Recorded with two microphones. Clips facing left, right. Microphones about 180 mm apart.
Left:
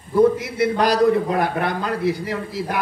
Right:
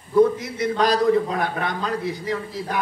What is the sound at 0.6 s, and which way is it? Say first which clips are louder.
A man's voice: left 3 dB; 10° left (ahead or behind).